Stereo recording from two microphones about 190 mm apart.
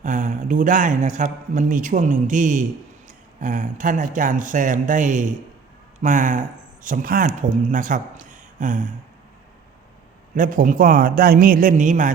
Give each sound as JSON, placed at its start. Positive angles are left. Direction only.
{"t": 0.0, "sound": "a man's voice", "side_deg": -40}
{"t": 10.3, "sound": "speech", "side_deg": -45}